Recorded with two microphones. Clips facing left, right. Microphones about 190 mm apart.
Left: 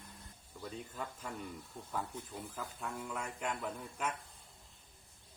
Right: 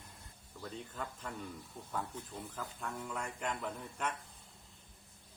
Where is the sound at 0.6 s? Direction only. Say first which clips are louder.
Even; 10° left (ahead or behind).